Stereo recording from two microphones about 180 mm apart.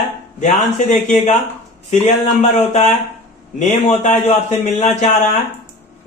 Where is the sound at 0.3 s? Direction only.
45° left (ahead or behind).